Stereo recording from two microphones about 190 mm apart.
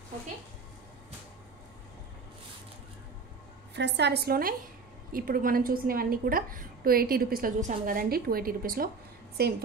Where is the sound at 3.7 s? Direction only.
65° right (ahead or behind).